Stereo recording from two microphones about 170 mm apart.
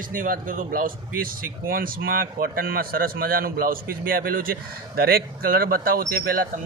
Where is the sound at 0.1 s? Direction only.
55° right (ahead or behind).